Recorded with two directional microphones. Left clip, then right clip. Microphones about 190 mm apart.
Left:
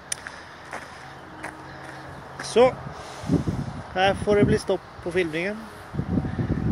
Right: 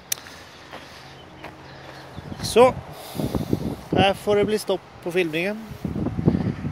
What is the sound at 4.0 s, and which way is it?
Speech, 10° right (ahead or behind).